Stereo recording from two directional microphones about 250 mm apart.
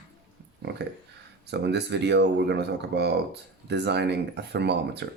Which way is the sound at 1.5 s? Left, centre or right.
Right.